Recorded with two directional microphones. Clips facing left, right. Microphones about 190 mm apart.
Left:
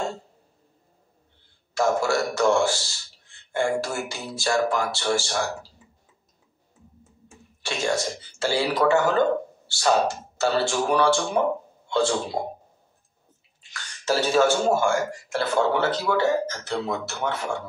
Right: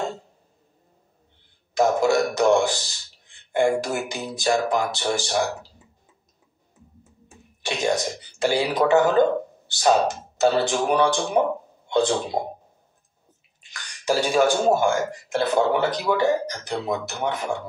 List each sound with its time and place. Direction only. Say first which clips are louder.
1.7 s a man's voice: right 3 dB; 20° right (ahead or behind)
7.6 s a man's voice: right 2 dB; 15° right (ahead or behind)
11.9 s a sound: right 2 dB; 20° right (ahead or behind)
13.6 s a man's voice: left 1 dB; 15° right (ahead or behind)